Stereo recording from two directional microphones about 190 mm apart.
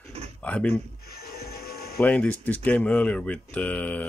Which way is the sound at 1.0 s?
55° left (ahead or behind).